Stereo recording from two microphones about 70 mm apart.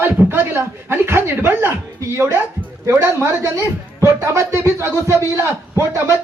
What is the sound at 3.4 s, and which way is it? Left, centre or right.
Speech, right.